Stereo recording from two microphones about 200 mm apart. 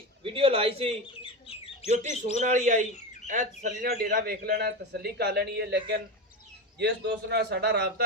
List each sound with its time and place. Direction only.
0.2 s a man's voice: 25° right (ahead or behind)
1.2 s bird: 30° left (ahead or behind)
2.4 s a man's voice: 40° right (ahead or behind)